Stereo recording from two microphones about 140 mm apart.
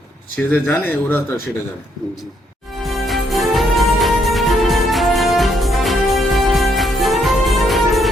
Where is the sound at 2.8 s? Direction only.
Centre (ahead or behind).